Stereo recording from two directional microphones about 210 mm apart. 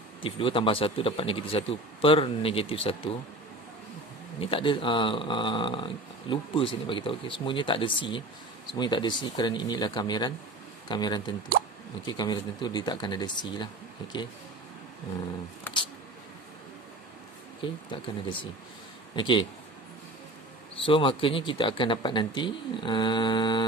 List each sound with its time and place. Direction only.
0.2 s speech: 25° left (ahead or behind)
4.4 s speech: 25° left (ahead or behind)
17.6 s speech: 25° left (ahead or behind)
20.8 s speech: 25° left (ahead or behind)